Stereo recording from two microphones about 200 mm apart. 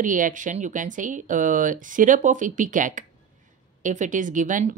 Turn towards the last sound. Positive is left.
turn(degrees=-40)  # may be behind; listen again after turning